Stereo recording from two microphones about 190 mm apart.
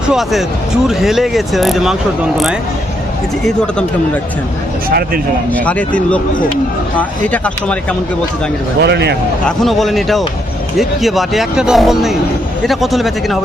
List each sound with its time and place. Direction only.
0.1 s speech: centre (ahead or behind)
5.5 s speech: 10° left (ahead or behind)
7.3 s speech: 5° left (ahead or behind)
8.8 s a man's voice: 60° right (ahead or behind)
9.6 s speech: centre (ahead or behind)